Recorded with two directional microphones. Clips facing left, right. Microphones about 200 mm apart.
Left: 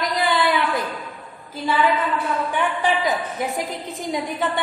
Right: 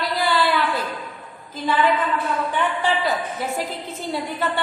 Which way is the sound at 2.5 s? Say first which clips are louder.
Left 1 dB; 15° left (ahead or behind).